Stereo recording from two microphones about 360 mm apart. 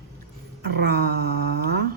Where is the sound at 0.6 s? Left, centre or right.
Right.